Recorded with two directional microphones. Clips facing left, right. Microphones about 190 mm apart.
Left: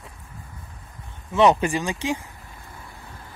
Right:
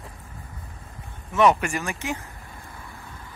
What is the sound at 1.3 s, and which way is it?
Speech, 30° left (ahead or behind).